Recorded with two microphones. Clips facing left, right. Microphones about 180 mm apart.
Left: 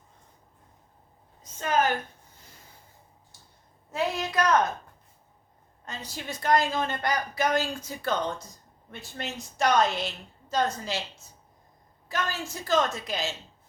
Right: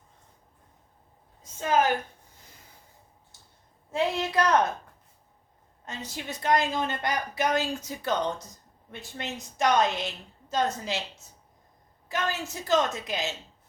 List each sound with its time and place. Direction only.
3.9 s speech: 30° right (ahead or behind)
5.8 s a woman's voice: 20° right (ahead or behind)
12.0 s speech: 20° right (ahead or behind)